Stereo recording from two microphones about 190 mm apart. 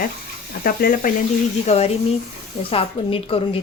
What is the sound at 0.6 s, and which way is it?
Speech, 50° left (ahead or behind).